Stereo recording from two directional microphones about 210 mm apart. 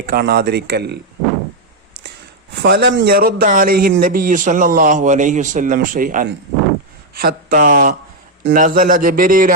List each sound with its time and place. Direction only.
0.0 s speech: 45° right (ahead or behind)
2.6 s a man's voice: 50° right (ahead or behind)